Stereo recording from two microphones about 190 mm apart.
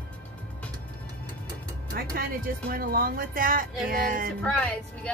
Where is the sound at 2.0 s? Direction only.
50° right (ahead or behind).